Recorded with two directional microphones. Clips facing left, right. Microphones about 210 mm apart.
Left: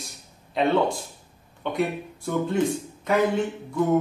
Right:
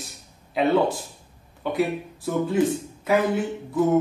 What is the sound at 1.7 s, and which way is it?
Speech, 5° right (ahead or behind).